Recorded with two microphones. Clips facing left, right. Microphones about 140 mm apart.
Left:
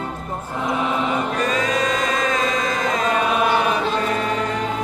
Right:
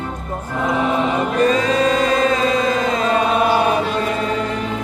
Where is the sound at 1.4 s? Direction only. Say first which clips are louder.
Right 8 dB; 30° right (ahead or behind).